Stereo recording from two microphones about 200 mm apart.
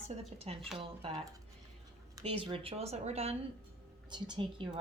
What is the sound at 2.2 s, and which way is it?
A woman's voice, 25° right (ahead or behind).